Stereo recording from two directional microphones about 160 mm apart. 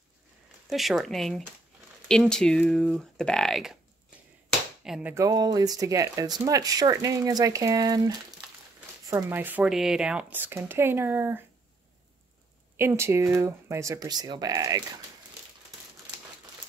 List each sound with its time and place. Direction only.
0.7 s speech: centre (ahead or behind)
4.5 s a sound: 5° right (ahead or behind)
5.1 s speech: 20° right (ahead or behind)
9.1 s speech: 10° right (ahead or behind)
12.7 s speech: 15° right (ahead or behind)